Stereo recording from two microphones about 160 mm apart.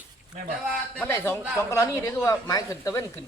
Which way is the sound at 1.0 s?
15° left (ahead or behind).